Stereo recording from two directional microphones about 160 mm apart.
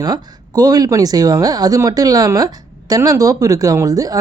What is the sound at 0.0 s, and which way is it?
Speech, 25° right (ahead or behind).